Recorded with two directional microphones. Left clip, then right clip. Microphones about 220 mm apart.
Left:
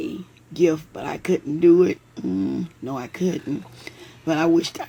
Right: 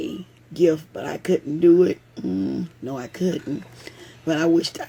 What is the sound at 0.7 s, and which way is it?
Speech, 10° right (ahead or behind).